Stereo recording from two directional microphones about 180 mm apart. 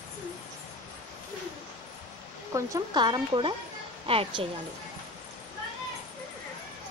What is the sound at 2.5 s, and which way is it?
A woman's voice, 20° right (ahead or behind).